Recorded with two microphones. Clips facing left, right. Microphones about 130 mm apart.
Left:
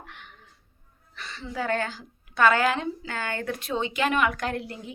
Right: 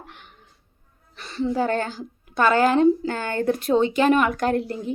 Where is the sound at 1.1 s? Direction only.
40° right (ahead or behind).